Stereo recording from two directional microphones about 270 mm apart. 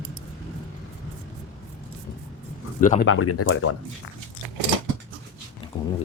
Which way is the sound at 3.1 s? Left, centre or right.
Left.